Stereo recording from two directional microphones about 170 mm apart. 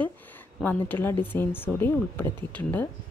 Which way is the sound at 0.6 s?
10° left (ahead or behind).